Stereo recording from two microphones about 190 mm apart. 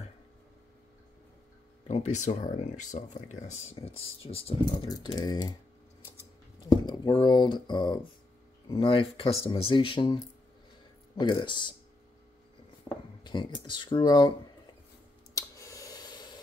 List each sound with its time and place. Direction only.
1.9 s speech: 35° left (ahead or behind); by 5.5 s 20° left (ahead or behind)
6.7 s speech: 25° left (ahead or behind)
12.8 s speech: 25° left (ahead or behind)
15.3 s a sound: 15° left (ahead or behind)